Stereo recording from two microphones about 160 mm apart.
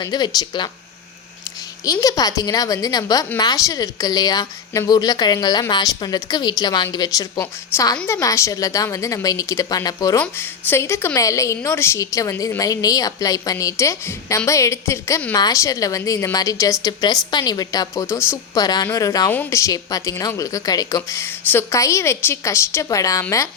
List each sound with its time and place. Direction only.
0.0 s a woman's voice: 25° left (ahead or behind)
1.8 s a woman's voice: 20° left (ahead or behind)